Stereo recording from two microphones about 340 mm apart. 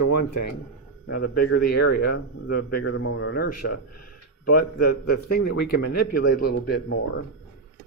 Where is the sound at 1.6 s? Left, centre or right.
Left.